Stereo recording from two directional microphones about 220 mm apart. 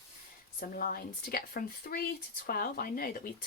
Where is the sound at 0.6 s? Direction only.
40° left (ahead or behind).